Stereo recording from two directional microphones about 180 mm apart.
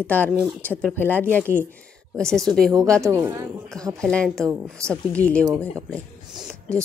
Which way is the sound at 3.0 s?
15° right (ahead or behind).